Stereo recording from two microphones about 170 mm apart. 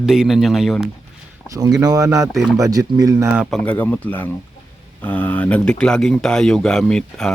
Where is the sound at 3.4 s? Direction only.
Centre (ahead or behind).